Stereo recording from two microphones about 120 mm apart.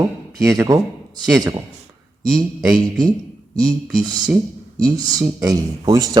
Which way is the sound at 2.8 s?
35° right (ahead or behind).